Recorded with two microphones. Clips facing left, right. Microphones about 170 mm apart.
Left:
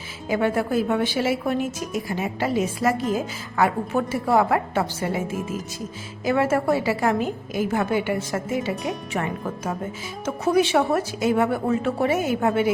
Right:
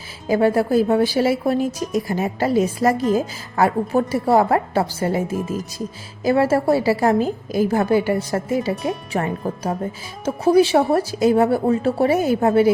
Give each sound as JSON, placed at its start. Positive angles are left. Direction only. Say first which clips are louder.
{"t": 0.3, "sound": "a woman's voice", "louder": "right 5 dB", "side_deg": -35}